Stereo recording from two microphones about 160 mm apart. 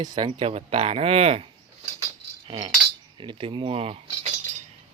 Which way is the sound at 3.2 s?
30° right (ahead or behind).